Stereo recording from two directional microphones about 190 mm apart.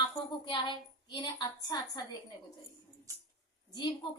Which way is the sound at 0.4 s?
25° left (ahead or behind).